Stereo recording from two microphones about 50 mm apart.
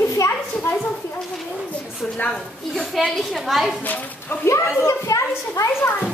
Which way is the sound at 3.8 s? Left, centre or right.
Left.